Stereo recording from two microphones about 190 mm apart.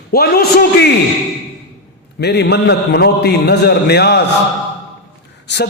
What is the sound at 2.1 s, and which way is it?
A man's voice, 60° left (ahead or behind).